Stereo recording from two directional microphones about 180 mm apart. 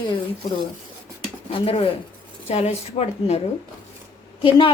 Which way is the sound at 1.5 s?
30° left (ahead or behind).